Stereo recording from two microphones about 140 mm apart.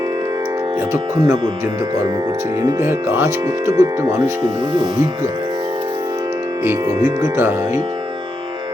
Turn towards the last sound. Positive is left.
turn(degrees=-20)  # may be behind; listen again after turning